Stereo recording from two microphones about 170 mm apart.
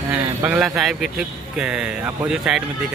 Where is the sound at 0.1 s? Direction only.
10° right (ahead or behind).